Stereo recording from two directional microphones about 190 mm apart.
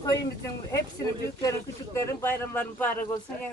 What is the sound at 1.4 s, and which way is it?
A man's voice, 15° left (ahead or behind).